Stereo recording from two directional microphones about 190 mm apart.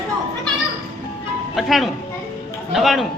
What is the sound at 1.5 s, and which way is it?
Music, centre (ahead or behind).